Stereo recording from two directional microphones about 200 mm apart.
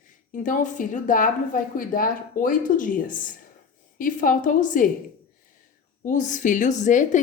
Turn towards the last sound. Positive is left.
turn(degrees=40)  # may be behind; listen again after turning